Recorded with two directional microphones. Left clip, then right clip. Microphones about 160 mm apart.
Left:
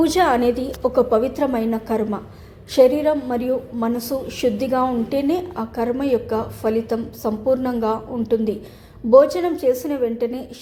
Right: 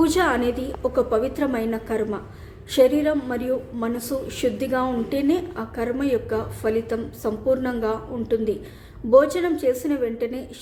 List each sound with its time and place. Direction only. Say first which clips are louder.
0.0 s a woman's voice: left 3 dB; 10° left (ahead or behind)